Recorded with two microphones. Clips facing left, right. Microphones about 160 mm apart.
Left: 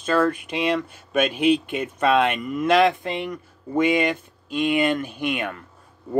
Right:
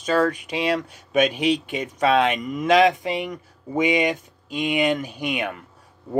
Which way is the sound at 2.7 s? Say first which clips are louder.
Right 2 dB; 15° right (ahead or behind).